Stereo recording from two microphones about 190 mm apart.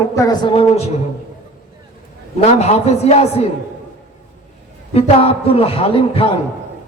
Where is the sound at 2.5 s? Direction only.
35° left (ahead or behind).